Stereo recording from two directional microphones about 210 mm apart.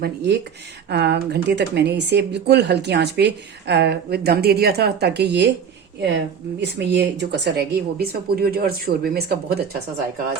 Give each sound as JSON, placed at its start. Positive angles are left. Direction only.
{"t": 0.0, "sound": "speech", "side_deg": -50}
{"t": 6.6, "sound": "speech", "side_deg": -55}